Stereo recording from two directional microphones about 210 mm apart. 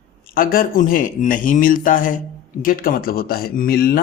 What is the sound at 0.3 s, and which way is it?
Speech, 40° left (ahead or behind).